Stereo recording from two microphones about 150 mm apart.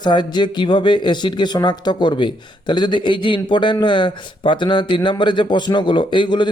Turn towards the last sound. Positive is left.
turn(degrees=30)  # may be behind; listen again after turning